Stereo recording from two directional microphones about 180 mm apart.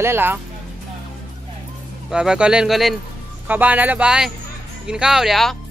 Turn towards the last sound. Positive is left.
turn(degrees=0)  # may be behind; listen again after turning